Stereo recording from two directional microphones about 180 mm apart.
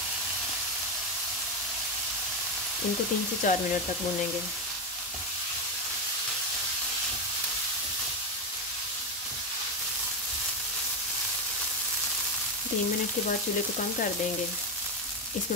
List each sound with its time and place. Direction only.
3.4 s speech: 45° left (ahead or behind)